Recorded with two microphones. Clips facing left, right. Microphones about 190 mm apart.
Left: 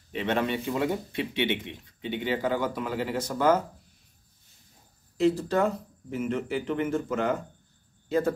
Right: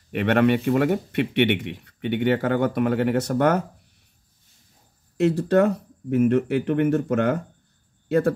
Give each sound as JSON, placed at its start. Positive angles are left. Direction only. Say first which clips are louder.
{"t": 0.1, "sound": "speech", "louder": "right 8 dB", "side_deg": -65}
{"t": 5.1, "sound": "speech", "louder": "right 5 dB", "side_deg": -65}